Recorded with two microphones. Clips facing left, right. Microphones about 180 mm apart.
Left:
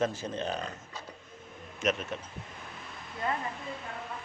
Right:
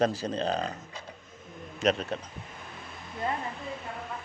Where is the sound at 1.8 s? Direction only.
35° right (ahead or behind).